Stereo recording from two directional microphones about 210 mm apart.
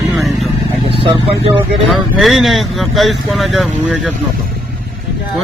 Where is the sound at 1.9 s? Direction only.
Centre (ahead or behind).